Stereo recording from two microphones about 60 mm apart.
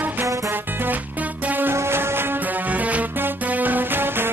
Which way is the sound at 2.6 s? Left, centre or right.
Right.